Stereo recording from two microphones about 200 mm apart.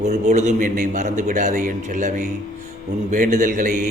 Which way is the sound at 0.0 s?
35° right (ahead or behind).